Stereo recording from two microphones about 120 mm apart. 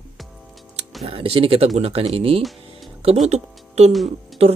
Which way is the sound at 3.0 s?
65° right (ahead or behind).